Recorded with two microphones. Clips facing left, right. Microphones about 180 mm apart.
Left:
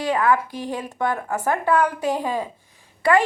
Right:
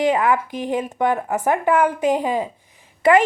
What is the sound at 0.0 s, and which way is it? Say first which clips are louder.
A woman's voice: right 2 dB; 20° right (ahead or behind).